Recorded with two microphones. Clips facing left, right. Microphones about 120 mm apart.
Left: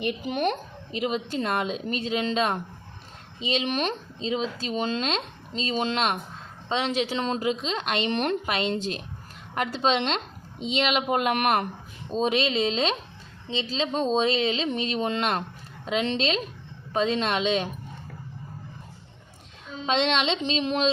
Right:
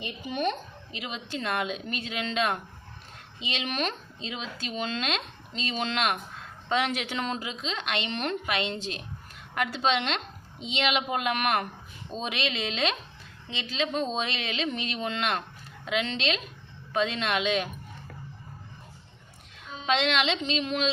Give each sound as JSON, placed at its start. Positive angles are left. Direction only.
{"t": 0.0, "sound": "a woman's voice", "side_deg": 55}
{"t": 0.9, "sound": "speech", "side_deg": 45}
{"t": 7.3, "sound": "speech", "side_deg": 45}
{"t": 19.8, "sound": "speech", "side_deg": 30}